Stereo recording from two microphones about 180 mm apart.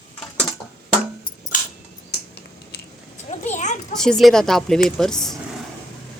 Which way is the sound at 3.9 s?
5° left (ahead or behind).